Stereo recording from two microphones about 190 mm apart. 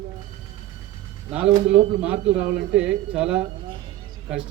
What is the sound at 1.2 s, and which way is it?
A man's voice, 5° right (ahead or behind).